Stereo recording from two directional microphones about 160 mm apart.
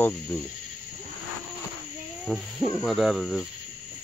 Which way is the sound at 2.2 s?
Centre (ahead or behind).